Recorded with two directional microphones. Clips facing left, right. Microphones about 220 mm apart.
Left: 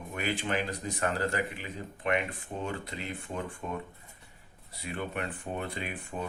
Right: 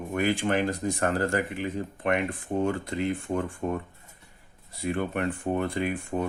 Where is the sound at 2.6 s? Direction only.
50° right (ahead or behind).